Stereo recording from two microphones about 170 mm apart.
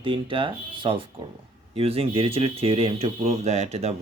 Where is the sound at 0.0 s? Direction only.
30° right (ahead or behind).